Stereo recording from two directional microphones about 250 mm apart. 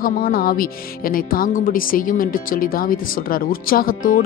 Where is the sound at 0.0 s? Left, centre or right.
Left.